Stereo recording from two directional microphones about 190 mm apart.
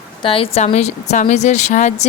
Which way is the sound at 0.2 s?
30° left (ahead or behind).